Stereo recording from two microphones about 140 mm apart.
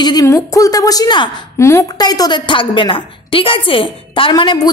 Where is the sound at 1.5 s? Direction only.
20° left (ahead or behind).